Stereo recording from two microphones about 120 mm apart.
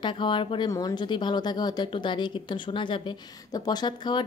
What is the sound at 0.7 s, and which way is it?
Speech, 30° left (ahead or behind).